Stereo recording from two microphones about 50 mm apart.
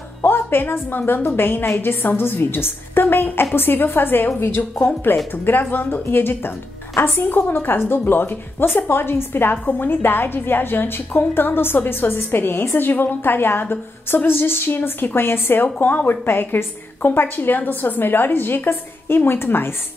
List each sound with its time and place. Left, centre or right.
0.2 s a woman's voice: left
4.4 s speech: left
5.0 s a woman's voice: left